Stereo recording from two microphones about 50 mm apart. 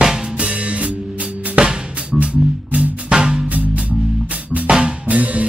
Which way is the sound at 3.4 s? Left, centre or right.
Right.